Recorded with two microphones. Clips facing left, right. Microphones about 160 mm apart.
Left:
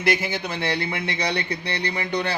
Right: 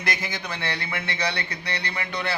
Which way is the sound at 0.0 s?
10° left (ahead or behind).